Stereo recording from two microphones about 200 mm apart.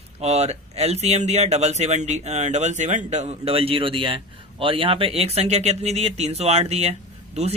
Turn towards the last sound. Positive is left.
turn(degrees=-35)  # may be behind; listen again after turning